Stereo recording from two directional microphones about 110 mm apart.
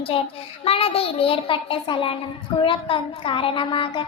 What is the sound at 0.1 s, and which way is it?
A child's voice, 60° left (ahead or behind).